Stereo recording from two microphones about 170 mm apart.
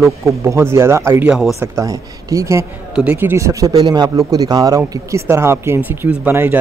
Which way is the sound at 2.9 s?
5° right (ahead or behind).